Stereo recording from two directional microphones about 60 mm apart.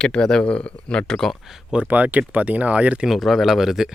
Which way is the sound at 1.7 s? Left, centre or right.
Right.